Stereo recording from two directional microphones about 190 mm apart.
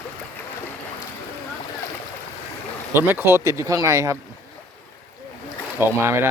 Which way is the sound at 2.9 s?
10° right (ahead or behind).